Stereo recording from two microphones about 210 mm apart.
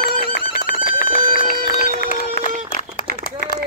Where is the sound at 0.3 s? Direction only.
45° left (ahead or behind).